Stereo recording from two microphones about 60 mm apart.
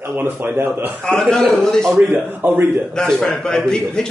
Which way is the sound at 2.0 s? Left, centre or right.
Right.